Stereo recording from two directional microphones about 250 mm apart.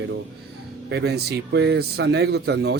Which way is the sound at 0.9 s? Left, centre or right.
Right.